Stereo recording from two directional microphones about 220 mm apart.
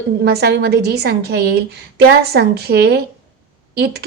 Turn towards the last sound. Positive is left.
turn(degrees=-45)  # may be behind; listen again after turning